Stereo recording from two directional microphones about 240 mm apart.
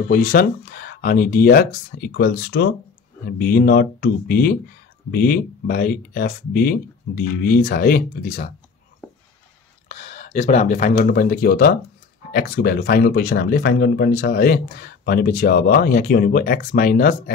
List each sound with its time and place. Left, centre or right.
0.1 s speech: left
9.8 s speech: left